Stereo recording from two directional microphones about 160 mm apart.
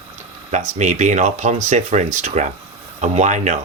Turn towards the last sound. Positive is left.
turn(degrees=-50)  # may be behind; listen again after turning